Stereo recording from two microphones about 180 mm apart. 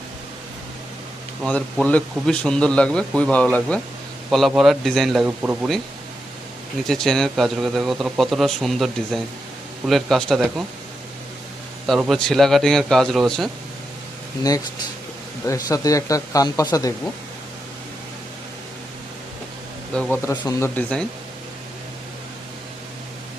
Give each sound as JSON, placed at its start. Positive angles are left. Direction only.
{"t": 1.5, "sound": "speech", "side_deg": 5}
{"t": 6.8, "sound": "speech", "side_deg": 0}
{"t": 11.9, "sound": "speech", "side_deg": 0}
{"t": 15.4, "sound": "speech", "side_deg": 20}
{"t": 19.9, "sound": "speech", "side_deg": 5}
{"t": 20.2, "sound": "speech", "side_deg": 20}